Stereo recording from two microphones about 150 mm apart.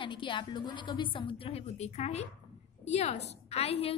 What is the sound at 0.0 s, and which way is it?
A woman's voice, 35° left (ahead or behind).